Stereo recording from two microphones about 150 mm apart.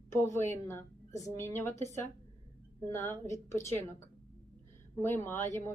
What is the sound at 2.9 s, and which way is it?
A woman's voice, 15° left (ahead or behind).